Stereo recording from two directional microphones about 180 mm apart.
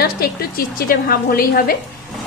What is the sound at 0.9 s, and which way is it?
Speech, 55° left (ahead or behind).